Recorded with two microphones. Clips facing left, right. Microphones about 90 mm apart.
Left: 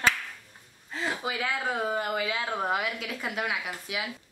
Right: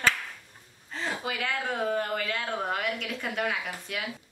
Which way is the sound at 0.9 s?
5° left (ahead or behind).